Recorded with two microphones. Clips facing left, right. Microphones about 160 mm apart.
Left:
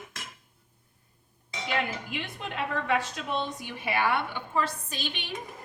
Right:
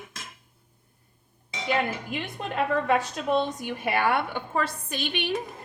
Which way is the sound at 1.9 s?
45° right (ahead or behind).